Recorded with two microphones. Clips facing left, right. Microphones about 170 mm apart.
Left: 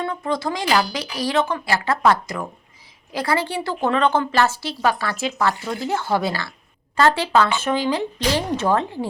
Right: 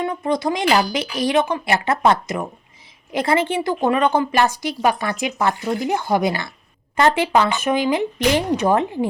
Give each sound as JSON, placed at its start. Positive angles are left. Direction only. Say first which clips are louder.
{"t": 0.0, "sound": "a woman's voice", "louder": "right 3 dB", "side_deg": -20}